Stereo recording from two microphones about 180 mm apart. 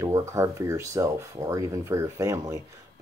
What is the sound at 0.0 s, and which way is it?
Speech, 15° right (ahead or behind).